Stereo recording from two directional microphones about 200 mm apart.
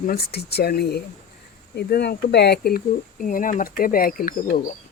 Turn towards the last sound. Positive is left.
turn(degrees=45)  # may be behind; listen again after turning